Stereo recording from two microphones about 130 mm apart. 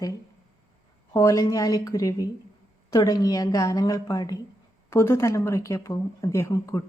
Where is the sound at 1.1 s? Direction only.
25° left (ahead or behind).